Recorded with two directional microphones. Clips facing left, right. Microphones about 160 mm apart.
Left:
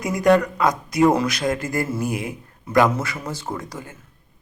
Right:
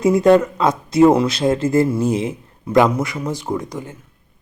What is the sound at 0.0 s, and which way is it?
Speech, 25° right (ahead or behind).